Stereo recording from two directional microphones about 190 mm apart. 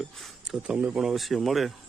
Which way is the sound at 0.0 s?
Centre (ahead or behind).